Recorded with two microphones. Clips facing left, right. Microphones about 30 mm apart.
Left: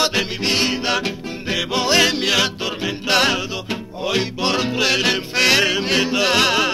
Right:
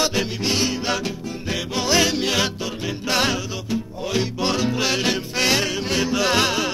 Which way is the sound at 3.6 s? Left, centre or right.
Left.